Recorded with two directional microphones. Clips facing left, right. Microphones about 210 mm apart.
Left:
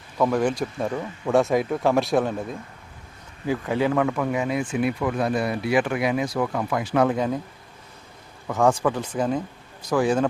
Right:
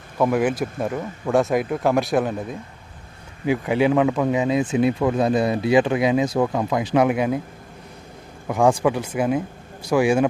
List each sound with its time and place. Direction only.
0.2 s speech: 5° right (ahead or behind)
3.4 s speech: 15° right (ahead or behind)
8.4 s speech: 15° right (ahead or behind)